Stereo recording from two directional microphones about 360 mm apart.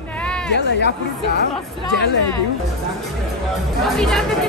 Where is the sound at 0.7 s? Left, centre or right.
Left.